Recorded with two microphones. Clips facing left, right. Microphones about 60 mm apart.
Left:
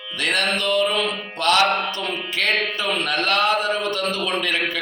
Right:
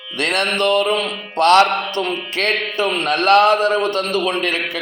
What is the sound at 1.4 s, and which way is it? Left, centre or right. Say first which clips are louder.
A man's voice: right 6 dB; right.